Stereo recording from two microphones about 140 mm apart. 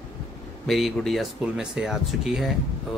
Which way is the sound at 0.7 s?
Centre (ahead or behind).